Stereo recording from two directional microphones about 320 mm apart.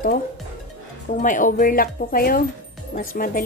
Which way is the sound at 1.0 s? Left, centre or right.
Left.